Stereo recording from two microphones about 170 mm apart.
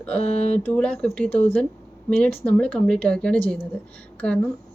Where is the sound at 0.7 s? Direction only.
5° left (ahead or behind).